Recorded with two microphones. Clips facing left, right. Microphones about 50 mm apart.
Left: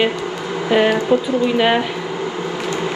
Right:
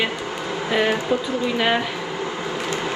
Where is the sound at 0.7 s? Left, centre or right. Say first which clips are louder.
Left 6 dB; left.